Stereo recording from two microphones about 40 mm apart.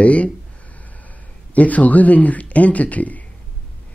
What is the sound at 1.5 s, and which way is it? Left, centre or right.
Speech, left.